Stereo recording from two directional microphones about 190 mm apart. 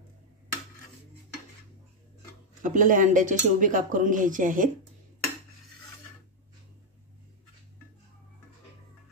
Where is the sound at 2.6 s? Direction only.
45° right (ahead or behind).